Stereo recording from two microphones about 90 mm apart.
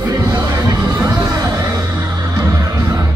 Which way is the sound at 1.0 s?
35° right (ahead or behind).